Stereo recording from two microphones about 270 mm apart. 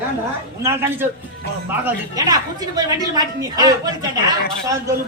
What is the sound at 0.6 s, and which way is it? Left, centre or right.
A man's voice, centre.